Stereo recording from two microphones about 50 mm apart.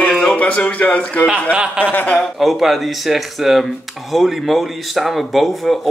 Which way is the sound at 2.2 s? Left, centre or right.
Centre.